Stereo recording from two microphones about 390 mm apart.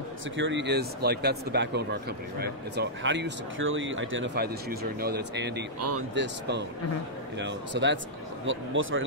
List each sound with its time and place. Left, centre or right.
0.4 s speech: right
5.8 s speech: right